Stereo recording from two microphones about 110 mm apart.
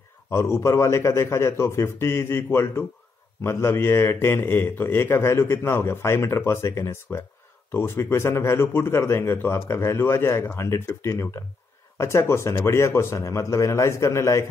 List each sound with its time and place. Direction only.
0.3 s a man's voice: 25° left (ahead or behind)